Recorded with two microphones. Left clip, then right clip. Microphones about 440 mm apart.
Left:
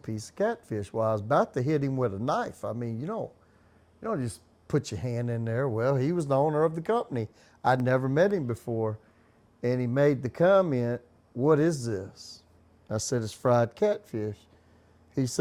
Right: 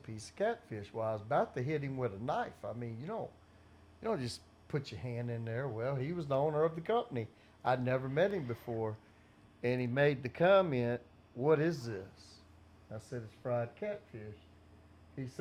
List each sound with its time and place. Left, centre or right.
0.0 s speech: left
4.3 s speech: left
12.9 s speech: left